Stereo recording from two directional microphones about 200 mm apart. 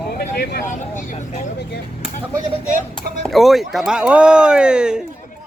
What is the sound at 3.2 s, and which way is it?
Speech, centre (ahead or behind).